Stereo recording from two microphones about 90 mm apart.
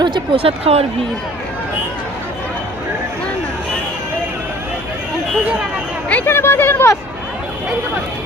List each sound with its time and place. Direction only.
0.0 s speech: 75° right (ahead or behind); by 0.7 s 90° right
6.1 s a woman's voice: 20° left (ahead or behind)